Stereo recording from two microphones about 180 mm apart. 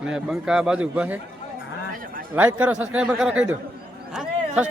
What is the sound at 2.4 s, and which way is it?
A man's voice, 10° right (ahead or behind).